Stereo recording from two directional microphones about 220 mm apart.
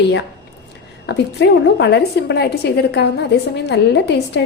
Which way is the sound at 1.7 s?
50° left (ahead or behind).